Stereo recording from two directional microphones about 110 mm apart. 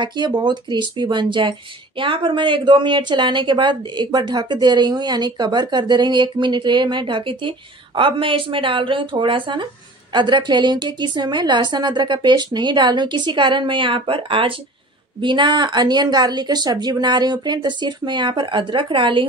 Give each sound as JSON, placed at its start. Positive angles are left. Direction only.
{"t": 0.0, "sound": "a woman's voice", "side_deg": -40}